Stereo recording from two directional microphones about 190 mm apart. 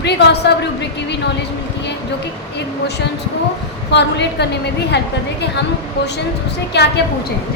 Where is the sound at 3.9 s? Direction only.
65° left (ahead or behind).